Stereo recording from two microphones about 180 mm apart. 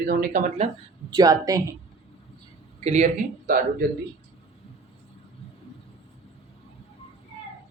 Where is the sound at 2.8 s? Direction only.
40° right (ahead or behind).